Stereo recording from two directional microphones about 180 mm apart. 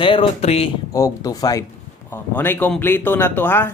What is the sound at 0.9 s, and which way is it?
Speech, 20° left (ahead or behind).